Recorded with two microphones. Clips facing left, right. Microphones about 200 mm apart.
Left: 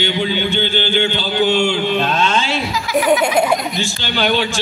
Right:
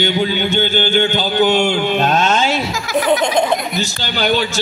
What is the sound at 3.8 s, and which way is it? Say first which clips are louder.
Speech: even; 40° right (ahead or behind).